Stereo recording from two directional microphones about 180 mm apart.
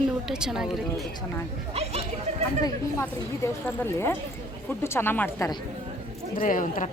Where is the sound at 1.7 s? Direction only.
35° right (ahead or behind).